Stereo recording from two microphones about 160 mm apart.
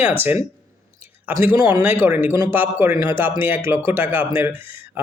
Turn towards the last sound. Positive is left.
turn(degrees=-15)  # may be behind; listen again after turning